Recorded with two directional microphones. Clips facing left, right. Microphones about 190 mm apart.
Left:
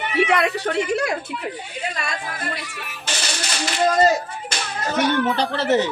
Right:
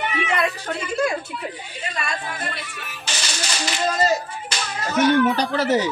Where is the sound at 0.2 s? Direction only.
70° left (ahead or behind).